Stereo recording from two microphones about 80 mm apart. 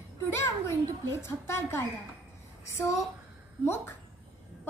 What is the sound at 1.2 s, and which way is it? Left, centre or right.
A child's voice, left.